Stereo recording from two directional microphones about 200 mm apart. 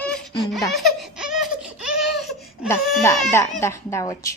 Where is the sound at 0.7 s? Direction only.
Centre (ahead or behind).